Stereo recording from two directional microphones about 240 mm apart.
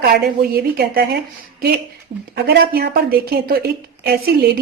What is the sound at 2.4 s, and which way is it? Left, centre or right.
A woman's voice, right.